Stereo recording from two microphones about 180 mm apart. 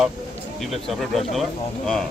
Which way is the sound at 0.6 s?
Centre (ahead or behind).